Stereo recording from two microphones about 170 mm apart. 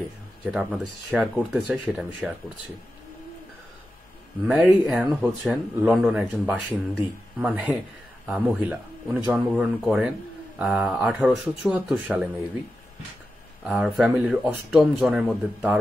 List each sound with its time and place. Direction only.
0.5 s speech: 5° right (ahead or behind)
4.5 s speech: centre (ahead or behind)
13.7 s speech: centre (ahead or behind)